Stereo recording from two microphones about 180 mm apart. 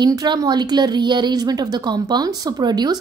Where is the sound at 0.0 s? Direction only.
25° right (ahead or behind).